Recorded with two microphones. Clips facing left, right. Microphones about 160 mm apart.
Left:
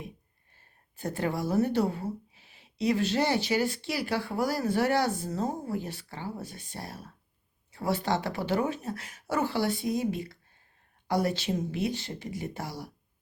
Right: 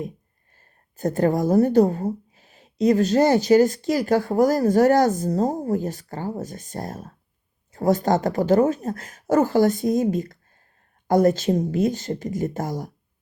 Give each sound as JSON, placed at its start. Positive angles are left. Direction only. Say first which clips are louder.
{"t": 0.6, "sound": "speech", "louder": "right 10 dB", "side_deg": -45}